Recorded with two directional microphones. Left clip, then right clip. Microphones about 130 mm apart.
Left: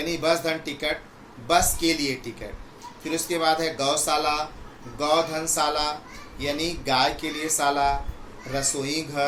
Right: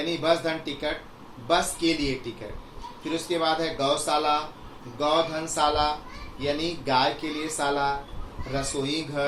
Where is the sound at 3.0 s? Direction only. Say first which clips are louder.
Left 2 dB; 30° left (ahead or behind).